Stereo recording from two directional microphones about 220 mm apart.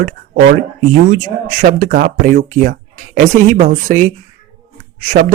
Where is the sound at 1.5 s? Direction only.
40° right (ahead or behind).